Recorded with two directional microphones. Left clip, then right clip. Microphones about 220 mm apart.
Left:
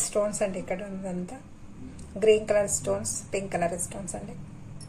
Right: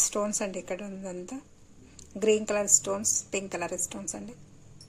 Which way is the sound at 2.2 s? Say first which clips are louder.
Left 4 dB; 40° right (ahead or behind).